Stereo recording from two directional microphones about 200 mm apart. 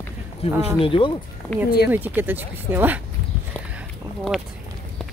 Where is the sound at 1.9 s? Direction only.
10° right (ahead or behind).